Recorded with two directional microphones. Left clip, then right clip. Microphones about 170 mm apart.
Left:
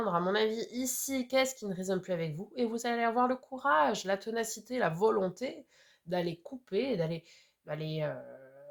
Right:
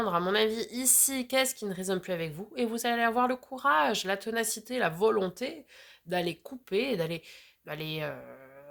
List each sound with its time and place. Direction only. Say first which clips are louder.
0.0 s speech: right 3 dB; 40° right (ahead or behind)